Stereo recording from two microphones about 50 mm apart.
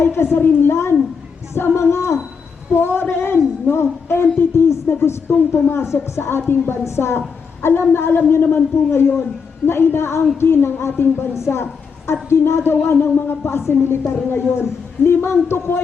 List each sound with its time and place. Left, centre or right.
0.0 s speech: left
2.7 s a woman's voice: left
5.4 s a woman's voice: left
5.7 s a woman's voice: left
10.4 s speech: left
11.3 s a sound: left
12.3 s a woman's voice: left